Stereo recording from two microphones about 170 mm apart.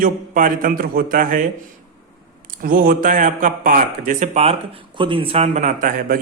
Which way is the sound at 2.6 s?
60° right (ahead or behind).